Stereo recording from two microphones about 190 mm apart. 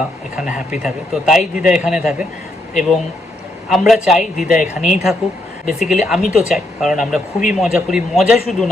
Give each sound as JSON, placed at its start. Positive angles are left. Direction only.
{"t": 0.3, "sound": "speech", "side_deg": -5}
{"t": 3.7, "sound": "speech", "side_deg": 0}